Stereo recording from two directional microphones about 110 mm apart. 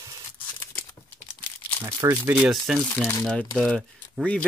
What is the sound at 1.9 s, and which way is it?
Speech, 25° right (ahead or behind).